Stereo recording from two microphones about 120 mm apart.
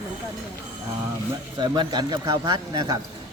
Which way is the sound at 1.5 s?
35° right (ahead or behind).